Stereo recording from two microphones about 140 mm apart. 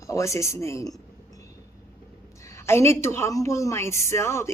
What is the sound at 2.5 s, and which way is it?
Speech, 20° left (ahead or behind).